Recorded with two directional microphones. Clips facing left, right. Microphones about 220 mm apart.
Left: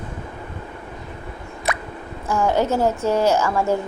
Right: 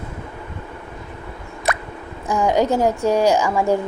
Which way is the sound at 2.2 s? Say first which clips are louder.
Right 2 dB; 15° right (ahead or behind).